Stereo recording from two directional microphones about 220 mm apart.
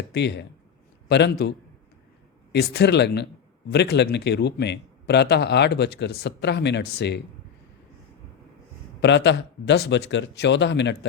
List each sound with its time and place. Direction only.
0.1 s a man's voice: 50° left (ahead or behind)
9.0 s a man's voice: 55° left (ahead or behind)